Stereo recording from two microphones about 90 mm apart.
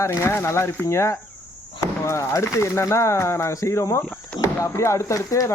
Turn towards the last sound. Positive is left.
turn(degrees=35)  # may be behind; listen again after turning